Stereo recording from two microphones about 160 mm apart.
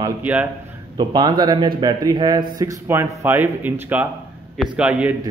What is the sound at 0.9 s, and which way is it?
A man's voice, 25° right (ahead or behind).